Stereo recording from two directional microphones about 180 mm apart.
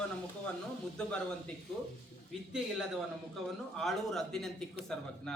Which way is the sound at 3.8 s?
Centre (ahead or behind).